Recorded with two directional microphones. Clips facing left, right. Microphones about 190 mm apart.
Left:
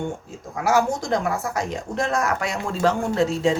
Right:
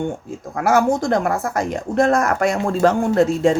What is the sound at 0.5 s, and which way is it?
Speech, 55° right (ahead or behind).